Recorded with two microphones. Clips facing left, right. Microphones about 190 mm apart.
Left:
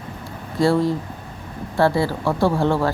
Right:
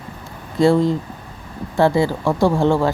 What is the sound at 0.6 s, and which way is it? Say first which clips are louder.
A woman's voice: right 3 dB; 20° right (ahead or behind).